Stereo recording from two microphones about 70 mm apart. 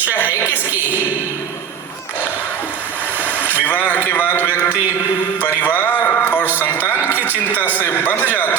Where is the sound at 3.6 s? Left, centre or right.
Left.